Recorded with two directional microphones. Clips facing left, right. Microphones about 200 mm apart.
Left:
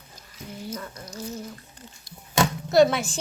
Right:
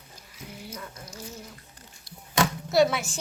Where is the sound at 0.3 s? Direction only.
10° right (ahead or behind).